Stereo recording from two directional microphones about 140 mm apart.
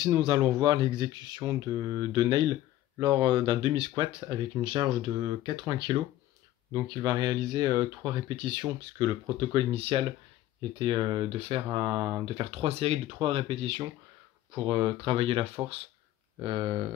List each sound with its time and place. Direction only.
0.0 s speech: 35° right (ahead or behind)
6.7 s speech: 25° right (ahead or behind)